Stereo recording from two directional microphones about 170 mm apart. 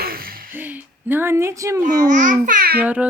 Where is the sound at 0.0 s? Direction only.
60° right (ahead or behind).